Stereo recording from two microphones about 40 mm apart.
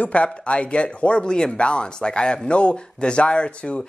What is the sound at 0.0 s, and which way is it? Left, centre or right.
Speech, left.